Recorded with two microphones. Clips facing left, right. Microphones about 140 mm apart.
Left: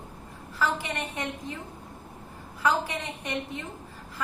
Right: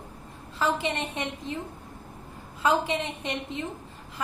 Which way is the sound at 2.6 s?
20° right (ahead or behind).